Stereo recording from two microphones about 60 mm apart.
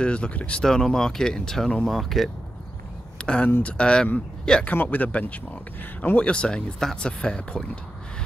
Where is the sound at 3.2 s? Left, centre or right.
Centre.